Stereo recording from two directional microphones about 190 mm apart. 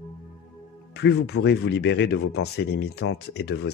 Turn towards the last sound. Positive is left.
turn(degrees=60)  # may be behind; listen again after turning